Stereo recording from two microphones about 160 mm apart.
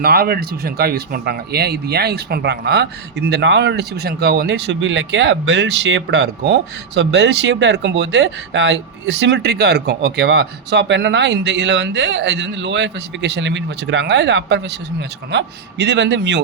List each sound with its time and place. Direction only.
0.0 s speech: 70° right (ahead or behind); by 16.4 s 90° right